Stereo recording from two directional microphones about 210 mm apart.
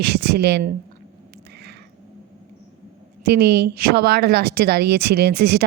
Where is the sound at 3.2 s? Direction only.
50° right (ahead or behind).